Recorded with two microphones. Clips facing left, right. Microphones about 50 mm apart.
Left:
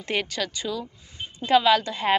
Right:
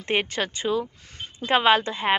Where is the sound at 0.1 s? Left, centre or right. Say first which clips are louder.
Right 3 dB; right.